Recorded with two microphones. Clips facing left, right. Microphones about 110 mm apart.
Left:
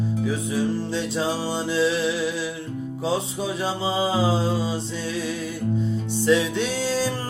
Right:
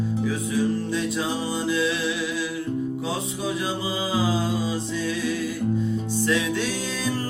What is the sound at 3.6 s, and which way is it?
Mantra, 30° left (ahead or behind).